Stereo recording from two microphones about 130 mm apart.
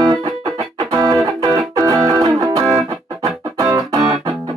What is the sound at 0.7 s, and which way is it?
Music, 30° right (ahead or behind).